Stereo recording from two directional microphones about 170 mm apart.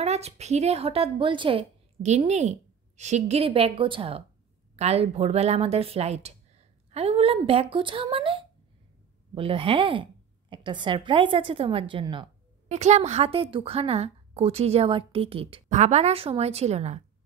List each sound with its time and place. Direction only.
0.0 s a woman's voice: 40° right (ahead or behind)
12.6 s a woman's voice: 40° right (ahead or behind)